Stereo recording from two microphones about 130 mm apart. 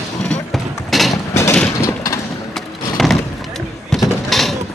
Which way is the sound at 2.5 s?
Centre (ahead or behind).